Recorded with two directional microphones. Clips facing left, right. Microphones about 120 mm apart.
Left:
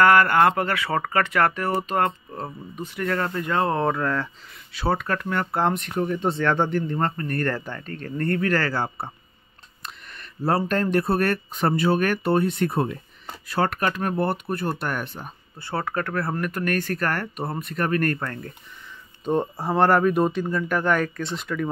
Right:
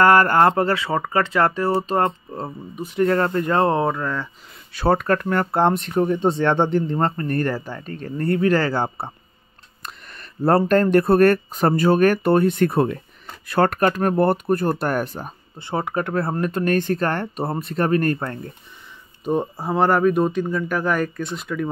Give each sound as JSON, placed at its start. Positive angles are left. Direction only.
{"t": 0.0, "sound": "speech", "side_deg": -35}
{"t": 0.8, "sound": "speech", "side_deg": -20}
{"t": 2.4, "sound": "speech", "side_deg": -10}
{"t": 3.0, "sound": "speech", "side_deg": -35}
{"t": 3.8, "sound": "speech", "side_deg": 0}
{"t": 4.7, "sound": "speech", "side_deg": -45}
{"t": 7.4, "sound": "speech", "side_deg": -10}
{"t": 9.8, "sound": "speech", "side_deg": -45}
{"t": 13.5, "sound": "speech", "side_deg": -50}
{"t": 15.6, "sound": "speech", "side_deg": -20}
{"t": 19.2, "sound": "speech", "side_deg": -5}